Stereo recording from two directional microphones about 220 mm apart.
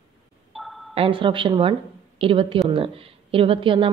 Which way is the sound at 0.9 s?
25° right (ahead or behind).